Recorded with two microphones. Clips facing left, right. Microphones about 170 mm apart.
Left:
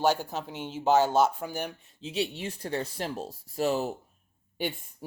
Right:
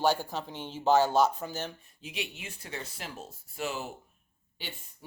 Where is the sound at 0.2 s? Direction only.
10° left (ahead or behind).